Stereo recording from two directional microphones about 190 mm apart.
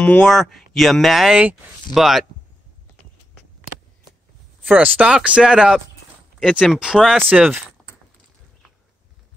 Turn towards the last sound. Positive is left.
turn(degrees=-5)  # may be behind; listen again after turning